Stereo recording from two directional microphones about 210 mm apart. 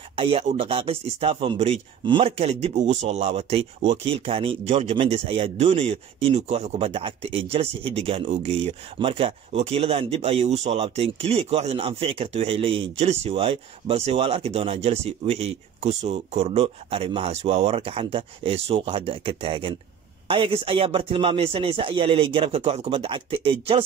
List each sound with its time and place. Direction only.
0.1 s speech: 25° right (ahead or behind)